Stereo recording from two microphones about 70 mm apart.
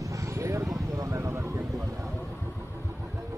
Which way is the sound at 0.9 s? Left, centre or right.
Right.